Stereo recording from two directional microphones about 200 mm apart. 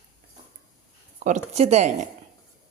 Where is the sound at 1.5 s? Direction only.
35° right (ahead or behind).